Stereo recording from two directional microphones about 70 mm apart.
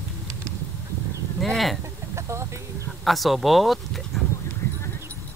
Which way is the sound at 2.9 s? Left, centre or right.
Centre.